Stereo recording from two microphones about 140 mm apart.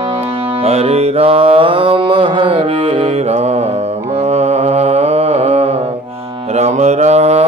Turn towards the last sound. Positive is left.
turn(degrees=-50)  # may be behind; listen again after turning